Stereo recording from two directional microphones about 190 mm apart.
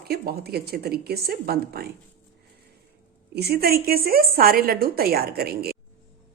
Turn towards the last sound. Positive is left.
turn(degrees=-55)  # may be behind; listen again after turning